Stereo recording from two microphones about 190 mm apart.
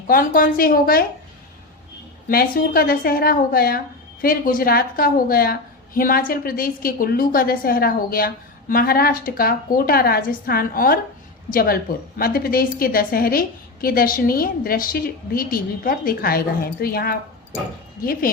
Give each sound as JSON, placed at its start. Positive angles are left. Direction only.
{"t": 0.1, "sound": "a woman's voice", "side_deg": 50}
{"t": 2.3, "sound": "a woman's voice", "side_deg": 50}